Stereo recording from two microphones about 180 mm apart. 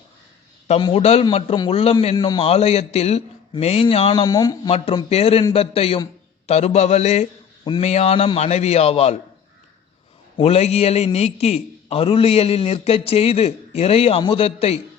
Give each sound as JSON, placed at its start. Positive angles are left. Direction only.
{"t": 0.8, "sound": "a man's voice", "side_deg": 30}
{"t": 4.7, "sound": "a man's voice", "side_deg": 35}
{"t": 10.3, "sound": "a man's voice", "side_deg": 35}